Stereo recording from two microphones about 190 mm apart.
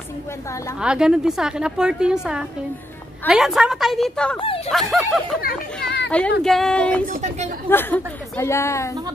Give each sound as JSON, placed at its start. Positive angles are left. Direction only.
{"t": 0.7, "sound": "a woman's voice", "side_deg": -5}
{"t": 7.1, "sound": "a woman's voice", "side_deg": -35}
{"t": 7.7, "sound": "a woman's voice", "side_deg": 10}